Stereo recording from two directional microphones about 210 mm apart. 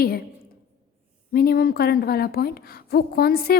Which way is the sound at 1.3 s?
45° left (ahead or behind).